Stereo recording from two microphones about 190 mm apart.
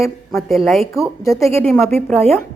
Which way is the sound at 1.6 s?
Centre (ahead or behind).